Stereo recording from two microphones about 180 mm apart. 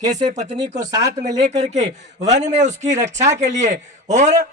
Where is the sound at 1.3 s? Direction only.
40° right (ahead or behind).